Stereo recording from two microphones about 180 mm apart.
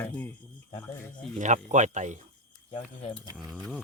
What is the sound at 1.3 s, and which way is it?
Speech, 40° right (ahead or behind).